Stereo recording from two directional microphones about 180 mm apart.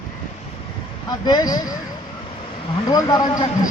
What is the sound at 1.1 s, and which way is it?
Speech, 20° left (ahead or behind).